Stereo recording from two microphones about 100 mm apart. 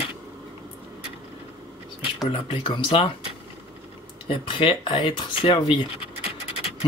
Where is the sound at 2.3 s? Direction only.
60° left (ahead or behind).